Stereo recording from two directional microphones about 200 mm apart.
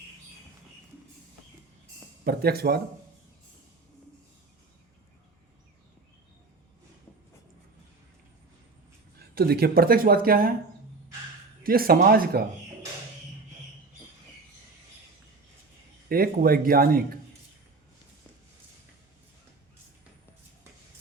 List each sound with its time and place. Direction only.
2.2 s speech: 50° right (ahead or behind)
9.3 s speech: 50° right (ahead or behind)
11.6 s speech: 45° right (ahead or behind)
16.0 s speech: 45° right (ahead or behind)